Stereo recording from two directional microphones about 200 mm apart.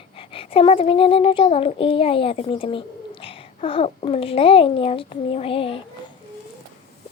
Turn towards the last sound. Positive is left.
turn(degrees=25)  # may be behind; listen again after turning